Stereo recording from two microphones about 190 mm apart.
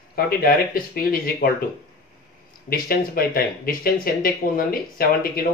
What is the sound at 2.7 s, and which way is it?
Speech, 50° left (ahead or behind).